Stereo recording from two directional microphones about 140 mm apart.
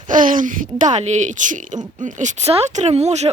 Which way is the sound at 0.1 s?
75° right (ahead or behind).